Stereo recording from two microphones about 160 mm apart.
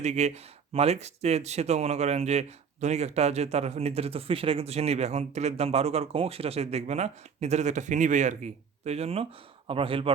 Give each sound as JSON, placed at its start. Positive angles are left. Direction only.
{"t": 0.0, "sound": "a man's voice", "side_deg": -45}